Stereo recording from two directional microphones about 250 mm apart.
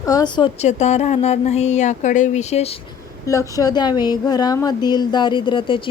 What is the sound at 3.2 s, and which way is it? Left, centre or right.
Speech, centre.